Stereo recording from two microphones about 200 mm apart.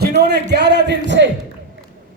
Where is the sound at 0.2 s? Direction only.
55° right (ahead or behind).